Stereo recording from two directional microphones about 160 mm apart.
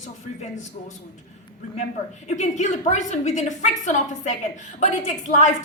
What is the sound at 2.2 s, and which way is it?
A woman's voice, 45° left (ahead or behind).